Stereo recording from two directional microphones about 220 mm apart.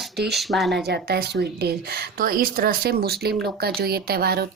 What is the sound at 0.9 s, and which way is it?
Speech, 50° right (ahead or behind).